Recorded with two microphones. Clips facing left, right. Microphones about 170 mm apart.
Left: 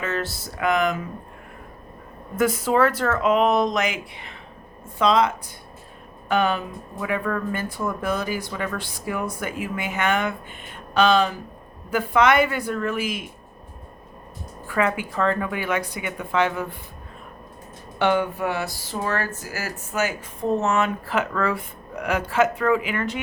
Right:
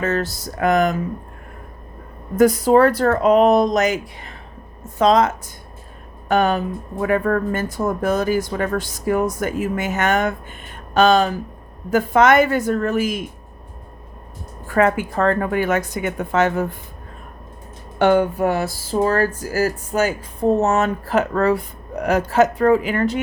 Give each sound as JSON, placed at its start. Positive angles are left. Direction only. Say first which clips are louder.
{"t": 0.0, "sound": "a woman's voice", "louder": "right 6 dB", "side_deg": -40}
{"t": 2.3, "sound": "a woman's voice", "louder": "right 7 dB", "side_deg": -40}
{"t": 14.7, "sound": "speech", "louder": "right 6 dB", "side_deg": -45}
{"t": 18.0, "sound": "a woman's voice", "louder": "right 6 dB", "side_deg": -45}